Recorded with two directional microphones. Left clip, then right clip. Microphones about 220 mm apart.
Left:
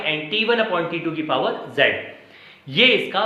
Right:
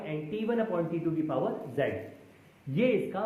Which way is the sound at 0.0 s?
20° left (ahead or behind).